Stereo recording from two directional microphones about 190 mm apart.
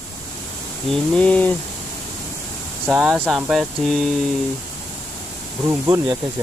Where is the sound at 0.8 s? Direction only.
5° left (ahead or behind).